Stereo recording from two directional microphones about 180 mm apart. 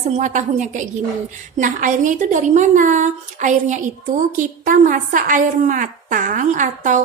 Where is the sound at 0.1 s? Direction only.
40° right (ahead or behind).